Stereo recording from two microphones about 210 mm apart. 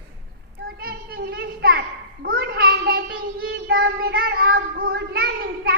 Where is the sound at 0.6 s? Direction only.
45° right (ahead or behind).